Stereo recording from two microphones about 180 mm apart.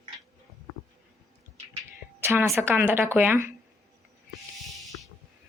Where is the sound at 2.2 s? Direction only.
15° right (ahead or behind).